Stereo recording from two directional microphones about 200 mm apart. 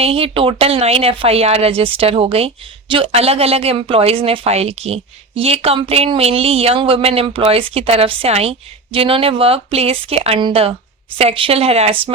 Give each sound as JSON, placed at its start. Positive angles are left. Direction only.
{"t": 0.0, "sound": "speech", "side_deg": -30}